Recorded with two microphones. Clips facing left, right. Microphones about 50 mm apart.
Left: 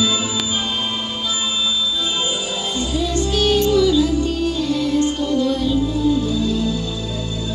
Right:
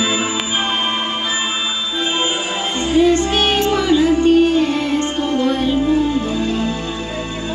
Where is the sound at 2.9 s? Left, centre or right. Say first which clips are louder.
Right 9 dB; right.